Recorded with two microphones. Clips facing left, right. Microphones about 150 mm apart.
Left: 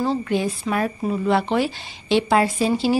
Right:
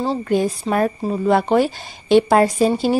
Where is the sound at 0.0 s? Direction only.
35° right (ahead or behind).